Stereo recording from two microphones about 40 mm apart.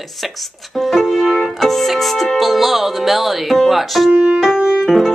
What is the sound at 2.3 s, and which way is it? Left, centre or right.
Music, centre.